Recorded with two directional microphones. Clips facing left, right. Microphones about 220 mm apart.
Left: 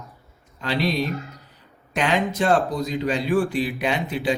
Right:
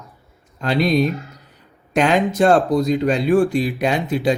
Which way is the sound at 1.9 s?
45° right (ahead or behind).